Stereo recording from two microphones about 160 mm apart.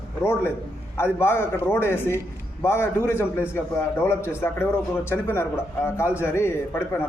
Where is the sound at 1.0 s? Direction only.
15° left (ahead or behind).